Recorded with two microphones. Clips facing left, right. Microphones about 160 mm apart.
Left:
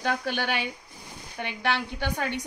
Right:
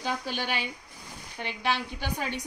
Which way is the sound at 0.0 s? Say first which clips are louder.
Left 4 dB; 60° left (ahead or behind).